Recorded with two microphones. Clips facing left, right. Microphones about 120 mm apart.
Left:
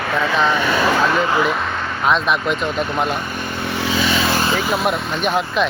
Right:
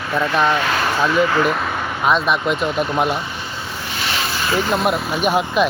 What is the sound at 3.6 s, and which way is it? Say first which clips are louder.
Vehicle: left 9 dB; 80° left.